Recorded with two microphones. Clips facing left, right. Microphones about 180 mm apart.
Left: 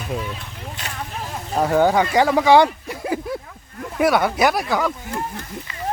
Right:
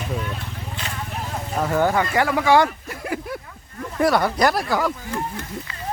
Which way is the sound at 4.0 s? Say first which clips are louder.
Left 1 dB; centre (ahead or behind).